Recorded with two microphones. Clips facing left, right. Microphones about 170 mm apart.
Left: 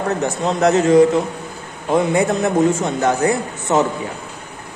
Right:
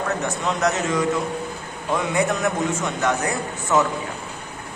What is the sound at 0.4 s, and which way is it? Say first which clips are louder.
A man's voice: left 9 dB; 30° left (ahead or behind).